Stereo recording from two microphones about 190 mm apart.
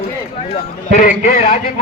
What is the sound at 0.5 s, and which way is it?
Speech, 40° left (ahead or behind).